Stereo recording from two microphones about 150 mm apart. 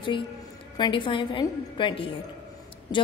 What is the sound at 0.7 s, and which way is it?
A woman's voice, 35° left (ahead or behind).